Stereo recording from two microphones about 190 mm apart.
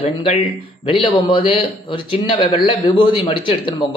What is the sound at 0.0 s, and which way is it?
Speech, 30° left (ahead or behind).